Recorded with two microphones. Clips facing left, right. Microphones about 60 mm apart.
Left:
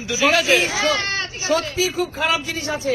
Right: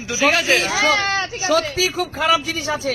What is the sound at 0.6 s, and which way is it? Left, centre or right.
Speech, right.